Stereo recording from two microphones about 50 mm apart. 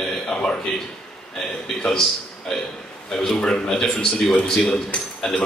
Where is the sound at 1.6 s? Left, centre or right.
Centre.